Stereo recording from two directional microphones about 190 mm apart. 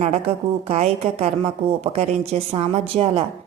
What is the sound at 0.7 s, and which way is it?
A woman's voice, 35° right (ahead or behind).